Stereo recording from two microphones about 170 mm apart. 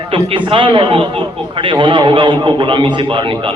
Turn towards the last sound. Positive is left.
turn(degrees=-30)  # may be behind; listen again after turning